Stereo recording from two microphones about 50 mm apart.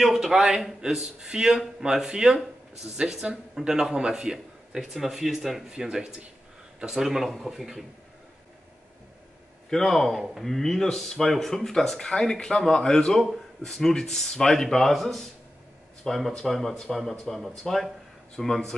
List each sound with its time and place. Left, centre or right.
0.0 s speech: centre
9.7 s speech: centre